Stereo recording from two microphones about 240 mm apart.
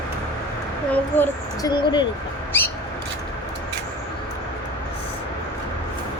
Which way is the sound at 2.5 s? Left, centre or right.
Centre.